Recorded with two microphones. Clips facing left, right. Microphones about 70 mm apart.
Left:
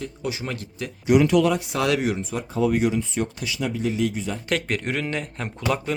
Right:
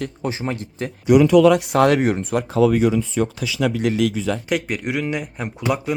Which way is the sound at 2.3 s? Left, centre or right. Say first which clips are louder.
Right 7 dB; right.